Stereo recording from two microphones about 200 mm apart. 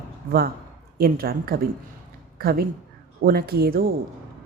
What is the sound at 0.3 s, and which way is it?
Speech, 50° right (ahead or behind).